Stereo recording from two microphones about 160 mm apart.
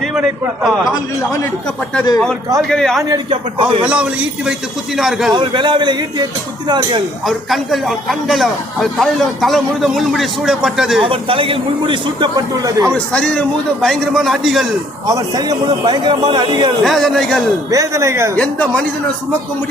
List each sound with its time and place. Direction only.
0.1 s a man's voice: 5° right (ahead or behind)
2.6 s a man's voice: centre (ahead or behind)
3.0 s a man's voice: 25° right (ahead or behind)
3.8 s a man's voice: 5° right (ahead or behind)
5.3 s a man's voice: 30° right (ahead or behind)
7.3 s a man's voice: centre (ahead or behind)
11.0 s a man's voice: 35° right (ahead or behind)
12.9 s a man's voice: 5° left (ahead or behind)
15.0 s a man's voice: 25° right (ahead or behind)
16.8 s a man's voice: centre (ahead or behind)
17.7 s a man's voice: 20° right (ahead or behind)
18.3 s a man's voice: 10° left (ahead or behind)